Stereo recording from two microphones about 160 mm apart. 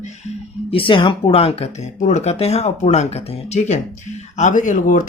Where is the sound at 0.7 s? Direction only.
35° left (ahead or behind).